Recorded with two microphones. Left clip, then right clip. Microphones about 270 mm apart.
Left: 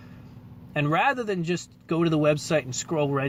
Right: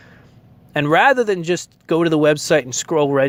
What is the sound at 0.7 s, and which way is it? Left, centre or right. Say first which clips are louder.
Speech: right 10 dB; right.